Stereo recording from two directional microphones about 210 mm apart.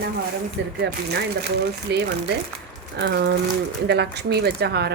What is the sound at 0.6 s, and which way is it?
Speech, 55° right (ahead or behind).